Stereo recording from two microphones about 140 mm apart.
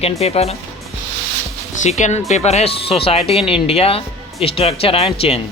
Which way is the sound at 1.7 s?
60° left (ahead or behind).